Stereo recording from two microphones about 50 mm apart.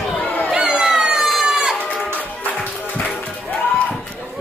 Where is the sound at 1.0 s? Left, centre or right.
Right.